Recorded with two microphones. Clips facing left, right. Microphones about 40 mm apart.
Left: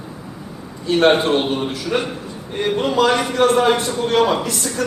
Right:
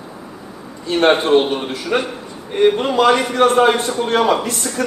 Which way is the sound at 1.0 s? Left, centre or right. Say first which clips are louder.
Right 3 dB; right.